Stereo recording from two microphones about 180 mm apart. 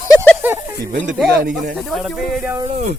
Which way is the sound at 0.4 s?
10° right (ahead or behind).